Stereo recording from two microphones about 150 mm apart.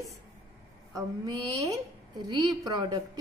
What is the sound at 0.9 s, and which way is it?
A woman's voice, 25° right (ahead or behind).